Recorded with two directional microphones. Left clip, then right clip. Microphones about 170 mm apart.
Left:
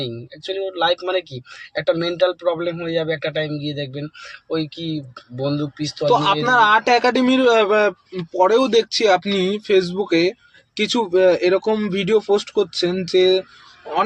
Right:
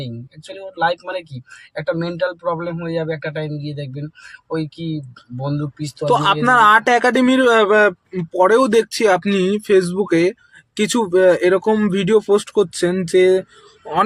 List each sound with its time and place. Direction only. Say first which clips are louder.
0.0 s speech: left 6 dB; 15° right (ahead or behind)
6.1 s speech: right 2 dB; 45° right (ahead or behind)